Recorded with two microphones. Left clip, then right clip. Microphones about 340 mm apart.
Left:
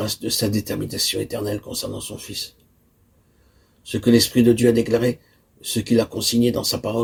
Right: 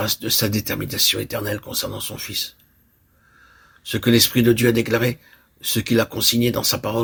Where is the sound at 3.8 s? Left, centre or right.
Right.